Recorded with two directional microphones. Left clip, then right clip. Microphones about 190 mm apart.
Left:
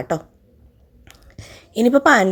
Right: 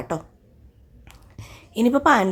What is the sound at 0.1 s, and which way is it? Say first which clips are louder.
A woman's voice: left 5 dB; 15° left (ahead or behind).